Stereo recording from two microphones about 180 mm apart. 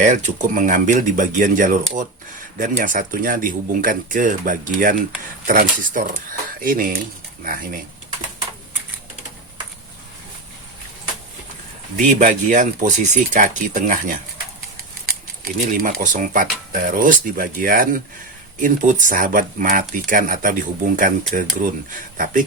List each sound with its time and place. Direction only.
0.0 s speech: 45° right (ahead or behind)
11.9 s speech: 45° right (ahead or behind)
15.8 s speech: 50° right (ahead or behind)